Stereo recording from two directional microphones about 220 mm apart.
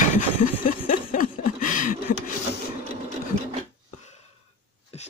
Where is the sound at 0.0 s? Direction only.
35° left (ahead or behind).